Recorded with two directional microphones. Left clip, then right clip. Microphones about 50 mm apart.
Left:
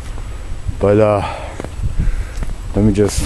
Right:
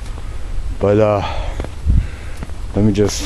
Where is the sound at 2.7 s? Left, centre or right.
Centre.